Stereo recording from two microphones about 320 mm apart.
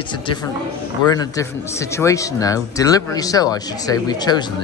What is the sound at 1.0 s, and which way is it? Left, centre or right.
A man's voice, centre.